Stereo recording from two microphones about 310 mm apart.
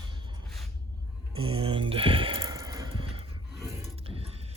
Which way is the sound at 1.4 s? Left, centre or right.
Centre.